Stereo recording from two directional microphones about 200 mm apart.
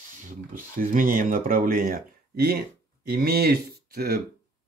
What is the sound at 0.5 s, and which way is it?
Speech, 45° right (ahead or behind).